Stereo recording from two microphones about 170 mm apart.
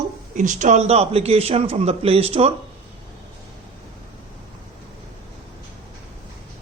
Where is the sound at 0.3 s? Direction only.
45° right (ahead or behind).